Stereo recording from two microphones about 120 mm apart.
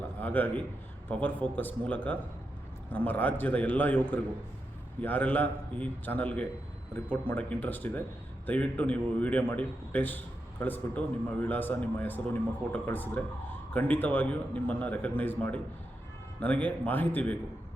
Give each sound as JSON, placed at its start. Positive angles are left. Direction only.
{"t": 0.0, "sound": "a man's voice", "side_deg": 15}